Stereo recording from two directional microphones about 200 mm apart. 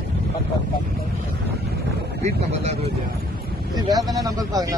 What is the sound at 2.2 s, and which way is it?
Speech, 30° right (ahead or behind).